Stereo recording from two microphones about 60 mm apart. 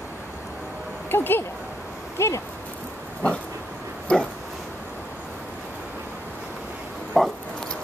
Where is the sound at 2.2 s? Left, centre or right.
Left.